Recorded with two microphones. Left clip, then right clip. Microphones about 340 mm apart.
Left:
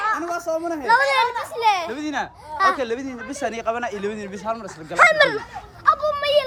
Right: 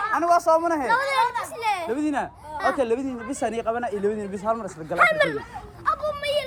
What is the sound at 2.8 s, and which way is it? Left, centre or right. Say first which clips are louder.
Speech: right 1 dB; centre.